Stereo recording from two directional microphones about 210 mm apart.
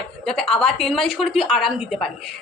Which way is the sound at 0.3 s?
Centre (ahead or behind).